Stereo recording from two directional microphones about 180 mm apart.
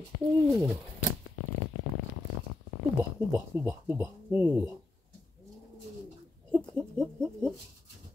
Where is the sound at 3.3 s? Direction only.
10° right (ahead or behind).